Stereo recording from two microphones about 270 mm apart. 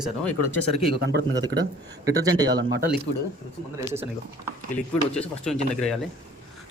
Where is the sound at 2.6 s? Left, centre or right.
Right.